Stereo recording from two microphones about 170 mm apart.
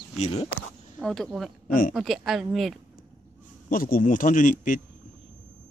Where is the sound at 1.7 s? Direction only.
55° left (ahead or behind).